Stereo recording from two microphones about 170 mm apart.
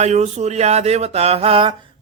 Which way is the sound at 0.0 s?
40° right (ahead or behind).